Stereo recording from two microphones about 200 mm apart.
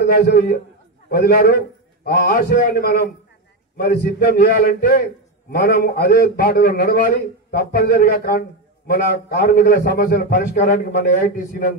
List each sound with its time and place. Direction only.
0.2 s a man's voice: 50° left (ahead or behind)